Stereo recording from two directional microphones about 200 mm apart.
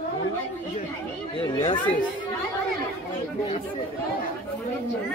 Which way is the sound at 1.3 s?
25° left (ahead or behind).